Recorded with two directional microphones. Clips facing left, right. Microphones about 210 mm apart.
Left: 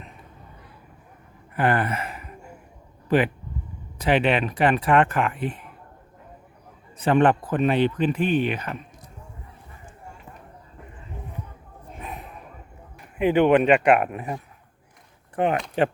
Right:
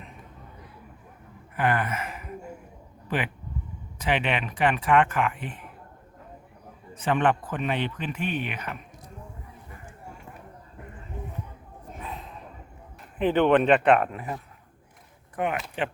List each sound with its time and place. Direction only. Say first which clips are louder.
1.5 s speech: left 3 dB; 35° left (ahead or behind)
3.9 s speech: left 6 dB; 35° left (ahead or behind)
6.9 s speech: left 5 dB; 35° left (ahead or behind)
13.1 s speech: left 3 dB; 10° left (ahead or behind)
15.4 s speech: left 5 dB; 30° left (ahead or behind)
15.8 s speech: left 10 dB; 40° left (ahead or behind)